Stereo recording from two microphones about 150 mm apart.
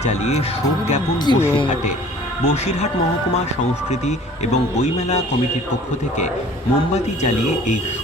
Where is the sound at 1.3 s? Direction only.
30° left (ahead or behind).